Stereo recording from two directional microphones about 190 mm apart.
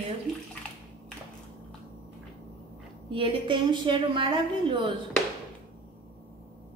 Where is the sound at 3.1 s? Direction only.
25° right (ahead or behind).